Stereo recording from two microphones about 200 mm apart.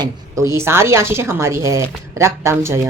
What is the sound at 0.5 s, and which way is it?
Speech, 10° right (ahead or behind).